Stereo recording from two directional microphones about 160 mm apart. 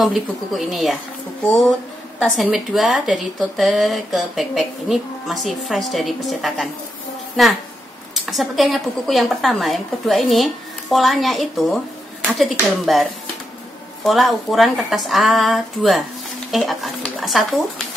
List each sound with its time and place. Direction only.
0.0 s speech: centre (ahead or behind)
14.0 s speech: centre (ahead or behind)